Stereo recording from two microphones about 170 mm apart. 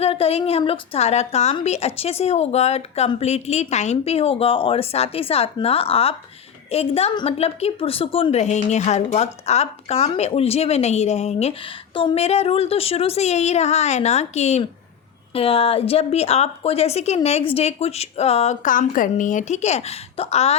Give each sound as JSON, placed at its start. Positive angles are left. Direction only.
{"t": 0.0, "sound": "a woman's voice", "side_deg": 35}